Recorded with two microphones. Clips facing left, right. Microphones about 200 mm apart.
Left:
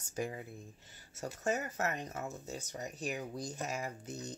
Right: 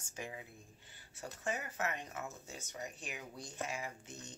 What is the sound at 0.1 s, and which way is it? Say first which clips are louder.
Speech: left 8 dB; 40° left (ahead or behind).